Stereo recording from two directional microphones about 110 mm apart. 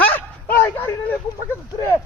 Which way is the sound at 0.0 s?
15° left (ahead or behind).